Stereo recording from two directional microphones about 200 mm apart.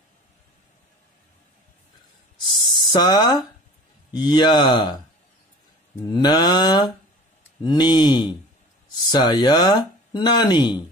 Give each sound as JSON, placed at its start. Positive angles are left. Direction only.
{"t": 2.4, "sound": "a sound", "side_deg": 25}
{"t": 4.1, "sound": "speech", "side_deg": 20}
{"t": 6.1, "sound": "speech", "side_deg": 20}